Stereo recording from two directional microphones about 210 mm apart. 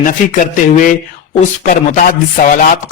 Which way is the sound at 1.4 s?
40° left (ahead or behind).